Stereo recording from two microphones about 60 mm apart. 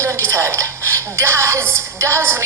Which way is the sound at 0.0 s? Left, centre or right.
Right.